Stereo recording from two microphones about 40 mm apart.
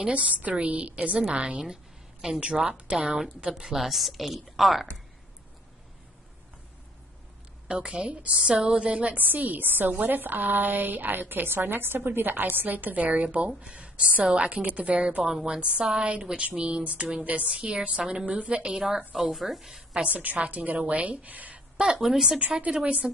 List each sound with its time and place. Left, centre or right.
0.0 s a woman's voice: right
3.7 s speech: centre
7.6 s a woman's voice: right
9.1 s a woman's voice: right
13.5 s a woman's voice: right
17.2 s a woman's voice: right
18.8 s a woman's voice: centre
19.3 s speech: centre
19.9 s a woman's voice: right
21.7 s a woman's voice: right
22.0 s a woman's voice: centre
22.7 s a woman's voice: right